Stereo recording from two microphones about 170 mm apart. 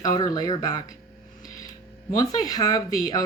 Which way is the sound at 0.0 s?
20° left (ahead or behind).